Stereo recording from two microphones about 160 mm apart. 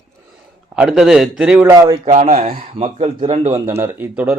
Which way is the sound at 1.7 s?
20° right (ahead or behind).